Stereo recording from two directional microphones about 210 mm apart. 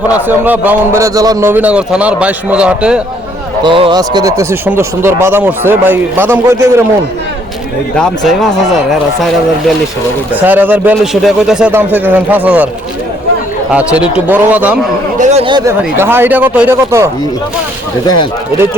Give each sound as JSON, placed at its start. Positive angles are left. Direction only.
{"t": 0.1, "sound": "a man's voice", "side_deg": -10}
{"t": 3.6, "sound": "a man's voice", "side_deg": -25}
{"t": 7.9, "sound": "speech", "side_deg": 5}
{"t": 10.4, "sound": "a man's voice", "side_deg": -10}
{"t": 13.7, "sound": "a man's voice", "side_deg": -5}
{"t": 15.2, "sound": "a man's voice", "side_deg": -30}
{"t": 15.8, "sound": "a man's voice", "side_deg": -10}